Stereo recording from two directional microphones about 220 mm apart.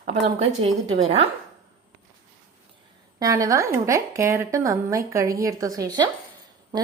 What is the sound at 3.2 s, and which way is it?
A woman's voice, 15° right (ahead or behind).